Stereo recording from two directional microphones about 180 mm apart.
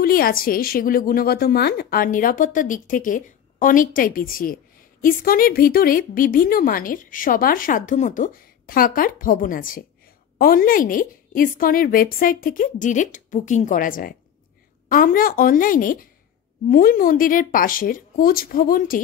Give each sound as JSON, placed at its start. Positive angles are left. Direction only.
{"t": 0.0, "sound": "a woman's voice", "side_deg": 55}